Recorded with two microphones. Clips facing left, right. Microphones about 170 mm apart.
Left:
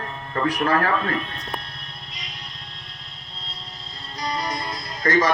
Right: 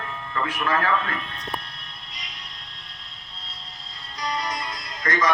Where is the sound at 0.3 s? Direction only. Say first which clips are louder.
Left 4 dB; 40° left (ahead or behind).